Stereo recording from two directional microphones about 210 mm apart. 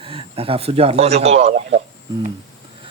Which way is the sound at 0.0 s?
25° right (ahead or behind).